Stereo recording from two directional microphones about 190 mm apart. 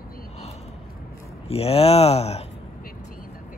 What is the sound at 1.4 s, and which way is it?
Speech, 30° left (ahead or behind).